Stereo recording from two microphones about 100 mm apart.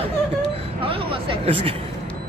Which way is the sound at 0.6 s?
70° right (ahead or behind).